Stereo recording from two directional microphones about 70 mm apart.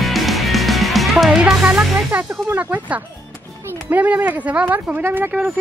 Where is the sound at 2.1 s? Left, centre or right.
Centre.